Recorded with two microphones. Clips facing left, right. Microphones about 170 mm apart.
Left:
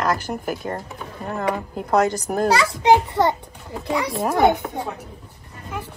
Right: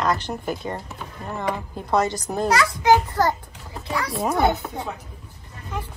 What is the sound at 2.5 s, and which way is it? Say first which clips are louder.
Speech: left 1 dB; 25° left (ahead or behind).